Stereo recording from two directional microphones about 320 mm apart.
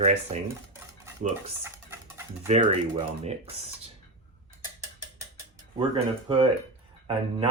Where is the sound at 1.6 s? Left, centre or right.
Centre.